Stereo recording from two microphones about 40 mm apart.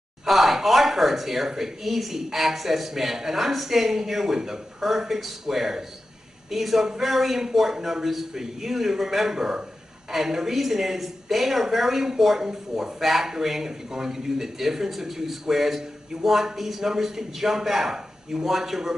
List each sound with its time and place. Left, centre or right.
0.2 s a man's voice: centre